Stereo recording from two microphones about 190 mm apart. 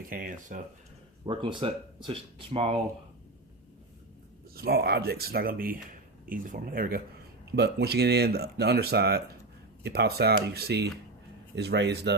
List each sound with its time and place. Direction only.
0.1 s speech: 45° right (ahead or behind)
1.2 s speech: 25° right (ahead or behind)
4.5 s speech: 55° right (ahead or behind)